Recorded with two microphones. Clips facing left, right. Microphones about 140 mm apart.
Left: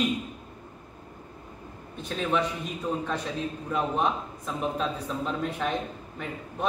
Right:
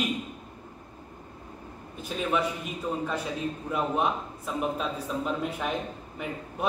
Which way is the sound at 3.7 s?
10° right (ahead or behind).